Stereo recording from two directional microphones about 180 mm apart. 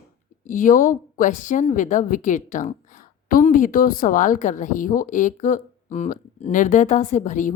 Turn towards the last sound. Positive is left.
turn(degrees=45)  # may be behind; listen again after turning